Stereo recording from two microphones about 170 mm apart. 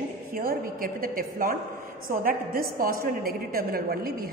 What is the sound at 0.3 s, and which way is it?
A woman's voice, 60° right (ahead or behind).